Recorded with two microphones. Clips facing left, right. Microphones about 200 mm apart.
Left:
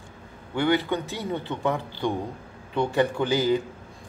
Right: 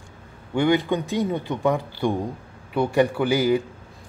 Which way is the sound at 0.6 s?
15° right (ahead or behind).